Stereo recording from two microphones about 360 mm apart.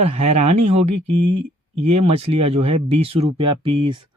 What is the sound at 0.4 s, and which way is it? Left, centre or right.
Speech, right.